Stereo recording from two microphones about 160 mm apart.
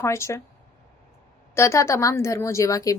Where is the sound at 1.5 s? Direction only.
15° left (ahead or behind).